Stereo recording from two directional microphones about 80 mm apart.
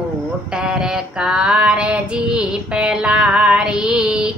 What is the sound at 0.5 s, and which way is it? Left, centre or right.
Child singing, centre.